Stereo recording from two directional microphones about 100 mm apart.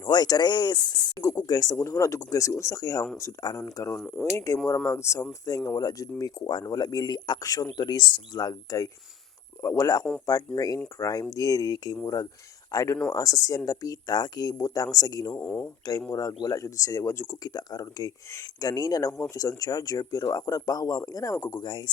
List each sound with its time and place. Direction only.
0.0 s speech: 45° left (ahead or behind)
15.3 s speech: 15° left (ahead or behind)
15.9 s speech: 35° left (ahead or behind)
17.5 s speech: 40° left (ahead or behind)
21.3 s speech: 25° left (ahead or behind)
21.6 s speech: 50° left (ahead or behind)